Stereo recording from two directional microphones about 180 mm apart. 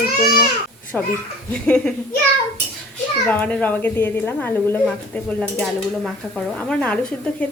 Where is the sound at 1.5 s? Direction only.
5° left (ahead or behind).